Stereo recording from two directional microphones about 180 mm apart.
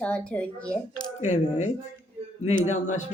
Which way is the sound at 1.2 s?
40° left (ahead or behind).